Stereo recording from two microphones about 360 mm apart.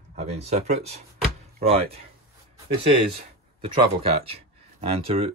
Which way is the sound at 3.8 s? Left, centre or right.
Centre.